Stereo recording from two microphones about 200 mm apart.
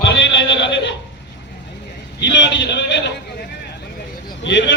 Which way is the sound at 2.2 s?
65° left (ahead or behind).